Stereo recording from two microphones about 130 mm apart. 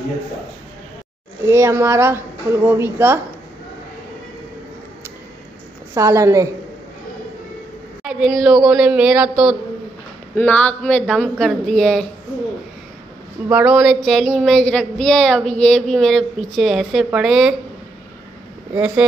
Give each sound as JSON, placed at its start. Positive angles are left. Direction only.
{"t": 1.4, "sound": "a woman's voice", "side_deg": -20}
{"t": 5.9, "sound": "a woman's voice", "side_deg": -25}
{"t": 8.0, "sound": "a sound", "side_deg": -5}
{"t": 10.3, "sound": "speech", "side_deg": 10}
{"t": 13.5, "sound": "speech", "side_deg": -10}
{"t": 14.0, "sound": "a sound", "side_deg": 0}